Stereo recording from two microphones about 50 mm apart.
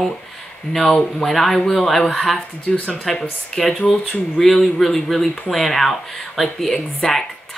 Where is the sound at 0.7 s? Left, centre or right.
Centre.